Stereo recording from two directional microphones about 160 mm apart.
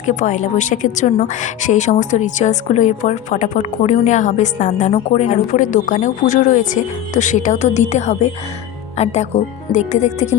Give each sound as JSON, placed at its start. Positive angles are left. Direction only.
{"t": 0.0, "sound": "a woman's voice", "side_deg": 50}
{"t": 4.9, "sound": "a woman's voice", "side_deg": 35}
{"t": 5.5, "sound": "a woman's voice", "side_deg": 50}